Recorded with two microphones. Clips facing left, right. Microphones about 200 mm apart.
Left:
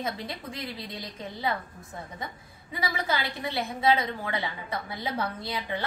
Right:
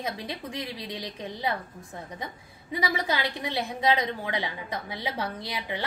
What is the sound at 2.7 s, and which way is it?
A woman's voice, 15° right (ahead or behind).